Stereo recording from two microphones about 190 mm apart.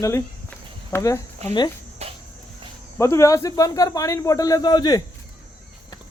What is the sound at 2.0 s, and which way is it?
Cricket, 35° right (ahead or behind).